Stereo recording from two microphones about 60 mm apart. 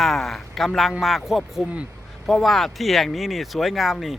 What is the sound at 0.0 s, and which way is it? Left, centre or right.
Speech, centre.